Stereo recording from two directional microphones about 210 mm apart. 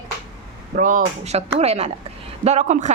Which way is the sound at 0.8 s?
40° right (ahead or behind).